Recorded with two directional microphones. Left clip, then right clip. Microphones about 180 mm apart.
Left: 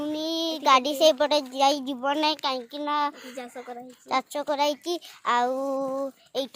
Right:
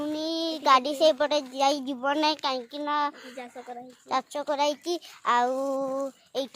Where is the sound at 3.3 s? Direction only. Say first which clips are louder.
Left 2 dB; 50° left (ahead or behind).